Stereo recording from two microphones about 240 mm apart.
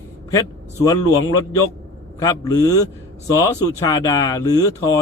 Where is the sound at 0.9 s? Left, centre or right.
Centre.